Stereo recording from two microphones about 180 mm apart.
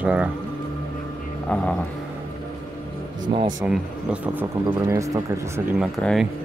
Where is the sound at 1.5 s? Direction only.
5° left (ahead or behind).